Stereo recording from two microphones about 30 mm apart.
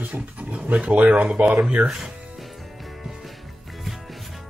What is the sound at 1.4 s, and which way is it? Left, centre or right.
Speech, right.